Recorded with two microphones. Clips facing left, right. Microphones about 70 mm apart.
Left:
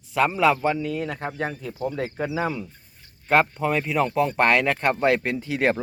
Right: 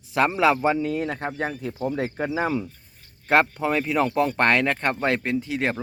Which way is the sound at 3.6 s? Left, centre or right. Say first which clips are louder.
Even; centre.